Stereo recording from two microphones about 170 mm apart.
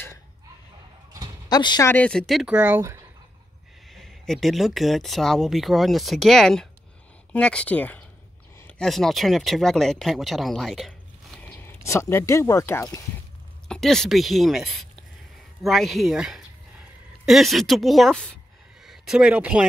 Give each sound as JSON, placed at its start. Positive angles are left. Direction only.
{"t": 1.5, "sound": "speech", "side_deg": 25}
{"t": 1.9, "sound": "speech", "side_deg": 5}
{"t": 3.9, "sound": "speech", "side_deg": 0}
{"t": 13.7, "sound": "a woman's voice", "side_deg": 5}